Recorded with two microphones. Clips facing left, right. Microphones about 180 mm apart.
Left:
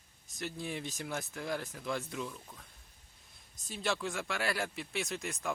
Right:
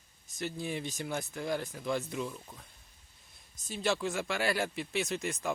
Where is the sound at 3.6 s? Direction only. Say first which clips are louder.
Right 4 dB; centre (ahead or behind).